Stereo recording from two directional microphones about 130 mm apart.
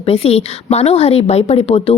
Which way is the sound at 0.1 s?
50° left (ahead or behind).